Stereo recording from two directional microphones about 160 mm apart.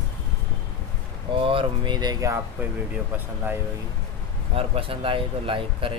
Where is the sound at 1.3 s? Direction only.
35° right (ahead or behind); by 3.6 s 10° right (ahead or behind).